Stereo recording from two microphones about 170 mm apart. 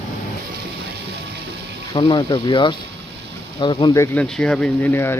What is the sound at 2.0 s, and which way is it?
Speech, 25° left (ahead or behind).